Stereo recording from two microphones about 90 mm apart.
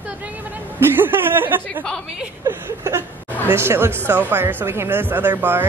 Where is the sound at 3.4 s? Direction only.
25° right (ahead or behind).